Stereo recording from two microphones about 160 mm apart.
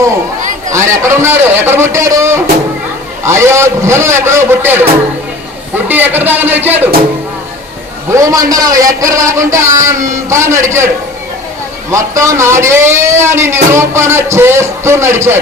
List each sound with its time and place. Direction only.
0.7 s speech: 20° right (ahead or behind)
8.1 s a man's voice: 20° right (ahead or behind)
11.9 s speech: 20° right (ahead or behind)